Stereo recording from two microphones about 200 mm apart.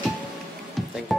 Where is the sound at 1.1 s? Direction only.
Centre (ahead or behind).